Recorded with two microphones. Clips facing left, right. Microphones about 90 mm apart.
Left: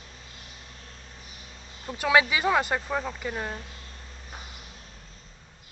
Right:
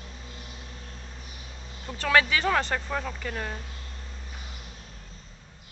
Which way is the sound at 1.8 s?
10° left (ahead or behind).